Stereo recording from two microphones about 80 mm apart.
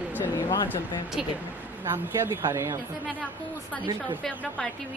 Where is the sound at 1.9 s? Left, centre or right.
Right.